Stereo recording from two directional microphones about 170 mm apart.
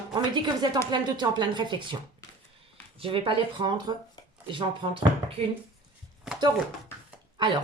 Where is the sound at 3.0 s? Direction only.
30° right (ahead or behind).